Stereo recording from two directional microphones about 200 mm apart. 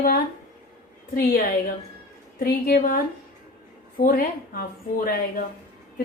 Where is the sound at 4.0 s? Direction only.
45° left (ahead or behind).